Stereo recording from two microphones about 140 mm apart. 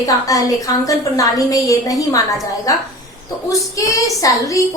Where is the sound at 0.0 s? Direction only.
25° left (ahead or behind).